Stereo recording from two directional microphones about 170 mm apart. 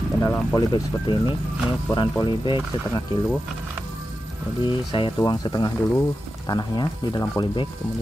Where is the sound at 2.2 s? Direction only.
30° left (ahead or behind).